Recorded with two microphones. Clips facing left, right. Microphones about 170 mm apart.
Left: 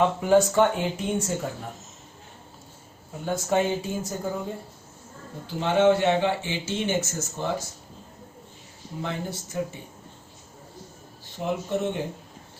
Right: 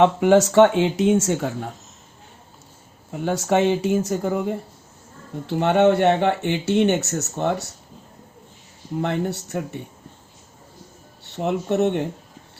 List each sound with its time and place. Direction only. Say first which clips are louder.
0.0 s speech: right 5 dB; 80° right
3.1 s speech: right 5 dB; 75° right (ahead or behind)
9.0 s speech: right 8 dB; 65° right (ahead or behind)
11.3 s speech: right 5 dB; 70° right (ahead or behind)